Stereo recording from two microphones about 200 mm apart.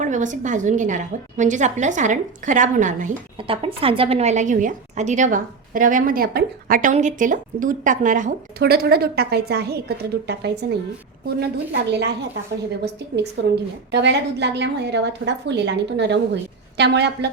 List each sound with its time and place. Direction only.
0.0 s a woman's voice: 40° right (ahead or behind)
3.3 s a woman's voice: 25° right (ahead or behind); by 12.1 s 55° right (ahead or behind)
13.4 s a woman's voice: 60° right (ahead or behind)